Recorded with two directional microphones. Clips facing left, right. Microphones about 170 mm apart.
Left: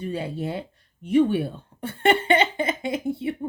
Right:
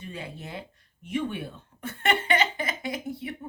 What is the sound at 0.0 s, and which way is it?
Speech, 30° left (ahead or behind).